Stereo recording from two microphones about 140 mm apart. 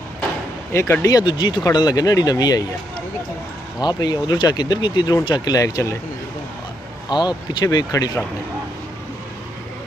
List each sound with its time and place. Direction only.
0.7 s speech: 20° left (ahead or behind)
3.8 s speech: 30° left (ahead or behind)
7.1 s speech: 30° left (ahead or behind)